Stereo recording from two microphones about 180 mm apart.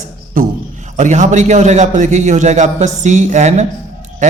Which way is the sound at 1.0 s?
40° right (ahead or behind).